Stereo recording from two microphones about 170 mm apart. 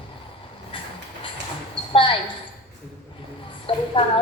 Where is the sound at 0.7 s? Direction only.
30° left (ahead or behind).